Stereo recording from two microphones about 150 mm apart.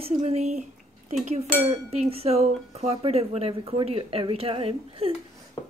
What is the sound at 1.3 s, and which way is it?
Dishes, 45° right (ahead or behind).